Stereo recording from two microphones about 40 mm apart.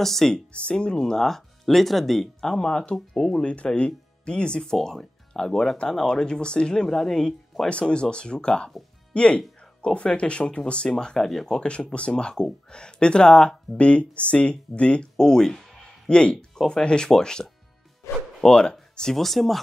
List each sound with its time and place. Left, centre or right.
0.0 s speech: centre
0.5 s speech: left
3.1 s speech: centre
3.4 s speech: left
4.6 s speech: centre
7.9 s speech: left
11.1 s speech: centre
11.6 s speech: left
13.7 s speech: left
19.1 s speech: centre